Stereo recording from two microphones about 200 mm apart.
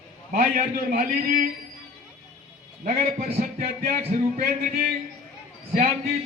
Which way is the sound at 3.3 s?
45° right (ahead or behind).